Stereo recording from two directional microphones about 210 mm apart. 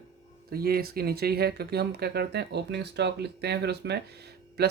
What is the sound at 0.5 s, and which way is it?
Speech, 45° right (ahead or behind).